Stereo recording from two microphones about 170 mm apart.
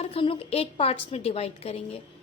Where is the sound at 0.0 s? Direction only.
35° left (ahead or behind).